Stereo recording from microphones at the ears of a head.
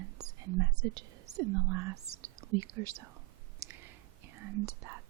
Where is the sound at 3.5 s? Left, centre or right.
Right.